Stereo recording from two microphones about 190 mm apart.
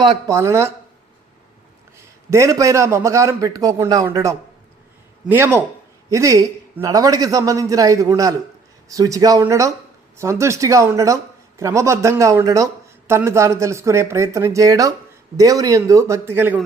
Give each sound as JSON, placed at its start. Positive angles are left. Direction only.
{"t": 0.0, "sound": "speech", "side_deg": -20}
{"t": 2.3, "sound": "speech", "side_deg": -15}